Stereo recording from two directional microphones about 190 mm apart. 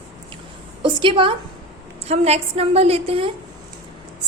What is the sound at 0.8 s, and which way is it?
A woman's voice, 25° right (ahead or behind).